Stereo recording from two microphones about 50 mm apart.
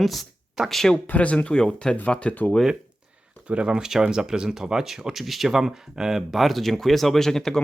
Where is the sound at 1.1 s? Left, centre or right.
Left.